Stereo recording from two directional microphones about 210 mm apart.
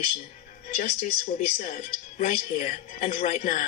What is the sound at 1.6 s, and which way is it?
Speech, 35° left (ahead or behind).